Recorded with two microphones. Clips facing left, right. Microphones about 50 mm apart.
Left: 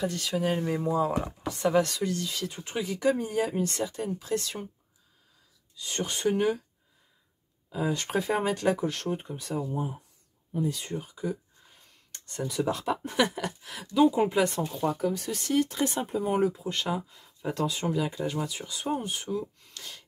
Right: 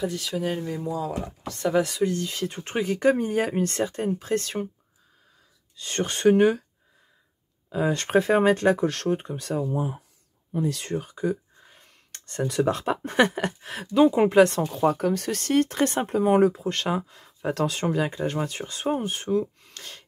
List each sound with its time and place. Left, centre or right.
0.0 s speech: centre
0.7 s speech: left
1.7 s speech: centre
2.2 s speech: right
5.8 s speech: right
7.7 s speech: right
10.5 s speech: right
13.9 s speech: right
14.7 s speech: right